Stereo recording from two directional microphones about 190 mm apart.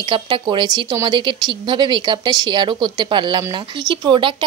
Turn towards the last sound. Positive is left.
turn(degrees=-25)  # may be behind; listen again after turning